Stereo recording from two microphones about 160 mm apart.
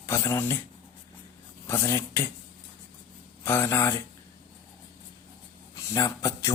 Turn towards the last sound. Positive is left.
turn(degrees=20)  # may be behind; listen again after turning